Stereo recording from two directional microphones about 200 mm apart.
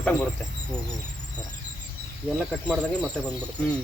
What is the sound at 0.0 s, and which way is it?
Speech, 5° left (ahead or behind).